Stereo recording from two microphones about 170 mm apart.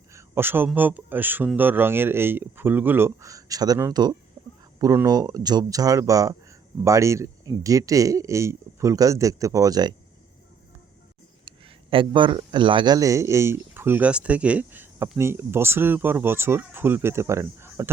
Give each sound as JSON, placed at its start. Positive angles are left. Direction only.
{"t": 0.1, "sound": "speech", "side_deg": -15}
{"t": 4.4, "sound": "chicken", "side_deg": -15}
{"t": 4.8, "sound": "speech", "side_deg": -20}
{"t": 11.4, "sound": "speech", "side_deg": -30}